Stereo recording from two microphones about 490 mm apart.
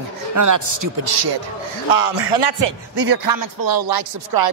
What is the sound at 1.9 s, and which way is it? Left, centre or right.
Speech, right.